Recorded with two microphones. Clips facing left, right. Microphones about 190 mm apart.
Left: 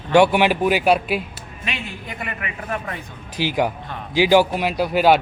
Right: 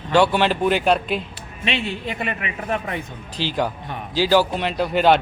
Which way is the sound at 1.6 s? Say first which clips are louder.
Right 6 dB; 30° right (ahead or behind).